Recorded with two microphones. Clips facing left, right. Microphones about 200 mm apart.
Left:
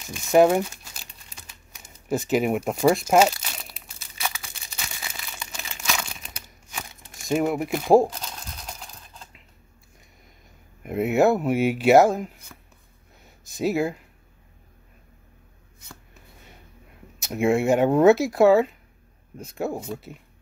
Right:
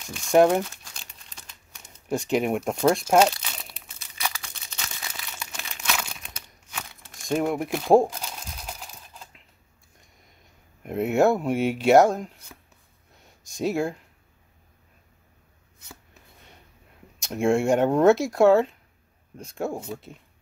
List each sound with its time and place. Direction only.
0.2 s crumpling: 5° left (ahead or behind)
7.2 s speech: 5° left (ahead or behind)
8.1 s sewing machine: 10° right (ahead or behind)
10.8 s speech: 5° left (ahead or behind)
13.2 s a sound: 5° left (ahead or behind)
17.2 s speech: 5° left (ahead or behind)